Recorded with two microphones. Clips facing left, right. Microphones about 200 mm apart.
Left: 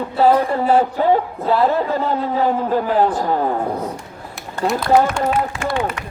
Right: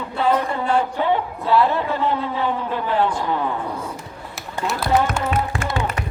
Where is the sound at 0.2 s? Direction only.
35° left (ahead or behind).